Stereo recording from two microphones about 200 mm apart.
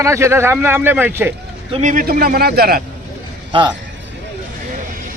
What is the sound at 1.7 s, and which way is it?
A man's voice, 40° right (ahead or behind).